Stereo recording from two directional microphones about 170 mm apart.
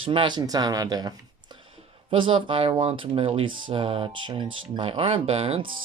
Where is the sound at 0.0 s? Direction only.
30° right (ahead or behind).